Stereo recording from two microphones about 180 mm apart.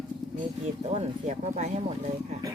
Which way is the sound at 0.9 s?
40° right (ahead or behind).